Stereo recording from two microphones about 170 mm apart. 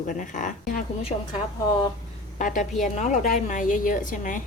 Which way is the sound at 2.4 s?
50° left (ahead or behind).